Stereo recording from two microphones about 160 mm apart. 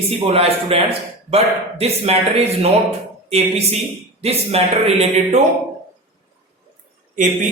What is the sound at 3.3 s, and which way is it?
A man's voice, 40° right (ahead or behind).